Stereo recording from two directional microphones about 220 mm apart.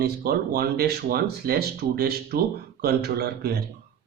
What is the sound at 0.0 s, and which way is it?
Speech, 45° right (ahead or behind).